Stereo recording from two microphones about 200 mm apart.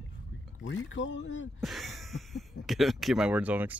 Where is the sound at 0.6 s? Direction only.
70° left (ahead or behind).